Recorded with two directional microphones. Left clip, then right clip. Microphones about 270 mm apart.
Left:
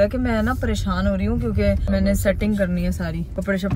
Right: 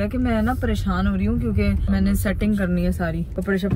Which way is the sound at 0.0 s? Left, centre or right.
Centre.